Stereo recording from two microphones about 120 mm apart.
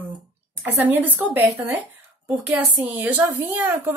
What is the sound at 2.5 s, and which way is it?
Speech, 15° right (ahead or behind).